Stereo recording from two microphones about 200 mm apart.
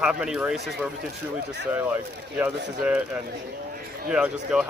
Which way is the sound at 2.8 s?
5° right (ahead or behind).